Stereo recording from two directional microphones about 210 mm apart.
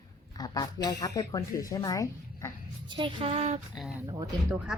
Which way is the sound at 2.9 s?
25° right (ahead or behind).